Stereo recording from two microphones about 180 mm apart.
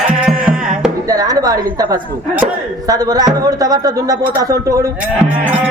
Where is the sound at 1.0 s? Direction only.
20° right (ahead or behind).